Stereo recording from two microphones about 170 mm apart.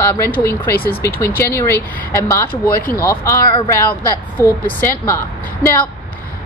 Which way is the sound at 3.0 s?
15° left (ahead or behind).